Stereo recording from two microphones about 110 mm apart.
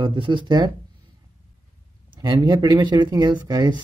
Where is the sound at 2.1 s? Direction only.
40° right (ahead or behind).